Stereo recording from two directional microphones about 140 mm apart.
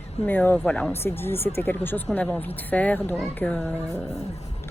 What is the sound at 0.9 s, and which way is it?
A woman's voice, 15° left (ahead or behind).